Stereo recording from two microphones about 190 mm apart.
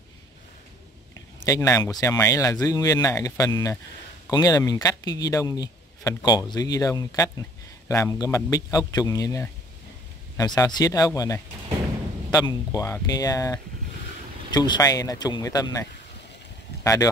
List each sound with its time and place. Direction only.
1.4 s speech: 15° left (ahead or behind)